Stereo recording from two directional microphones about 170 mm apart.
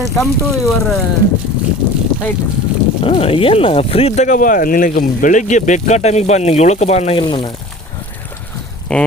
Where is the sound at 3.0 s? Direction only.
35° left (ahead or behind).